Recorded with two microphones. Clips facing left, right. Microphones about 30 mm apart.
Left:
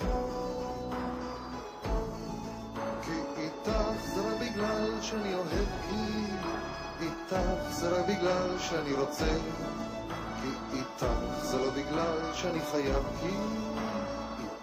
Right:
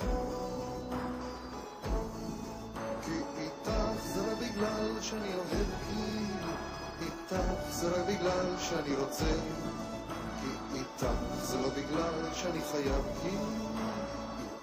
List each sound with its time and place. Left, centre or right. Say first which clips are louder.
0.0 s music: left 2 dB; centre
2.9 s music: even; centre
10.4 s music: left 2 dB; centre